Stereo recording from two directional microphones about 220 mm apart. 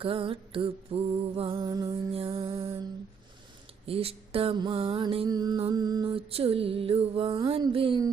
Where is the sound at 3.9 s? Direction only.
25° right (ahead or behind).